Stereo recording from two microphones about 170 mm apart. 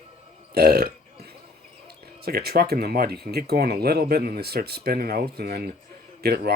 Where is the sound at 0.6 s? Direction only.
65° right (ahead or behind).